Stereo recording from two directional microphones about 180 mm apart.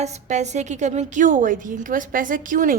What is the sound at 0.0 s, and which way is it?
A woman's voice, 40° right (ahead or behind).